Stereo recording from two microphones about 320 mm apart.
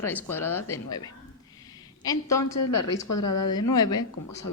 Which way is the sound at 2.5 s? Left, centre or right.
Left.